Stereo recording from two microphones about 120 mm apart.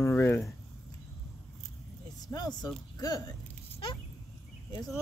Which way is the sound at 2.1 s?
30° left (ahead or behind).